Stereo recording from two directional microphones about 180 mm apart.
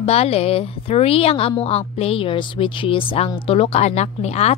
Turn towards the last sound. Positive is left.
turn(degrees=35)  # may be behind; listen again after turning